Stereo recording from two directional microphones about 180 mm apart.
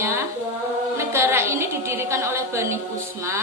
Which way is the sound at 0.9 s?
15° right (ahead or behind).